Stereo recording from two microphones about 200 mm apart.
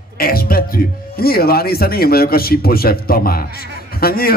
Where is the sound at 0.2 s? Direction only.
45° left (ahead or behind).